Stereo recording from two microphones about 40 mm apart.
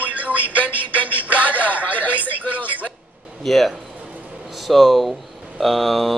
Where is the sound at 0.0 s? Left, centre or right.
Right.